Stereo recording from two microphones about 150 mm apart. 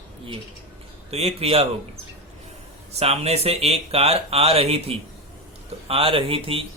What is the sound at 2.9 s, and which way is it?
Speech, 45° right (ahead or behind).